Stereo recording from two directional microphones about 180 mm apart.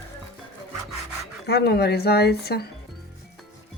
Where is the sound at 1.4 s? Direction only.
65° left (ahead or behind).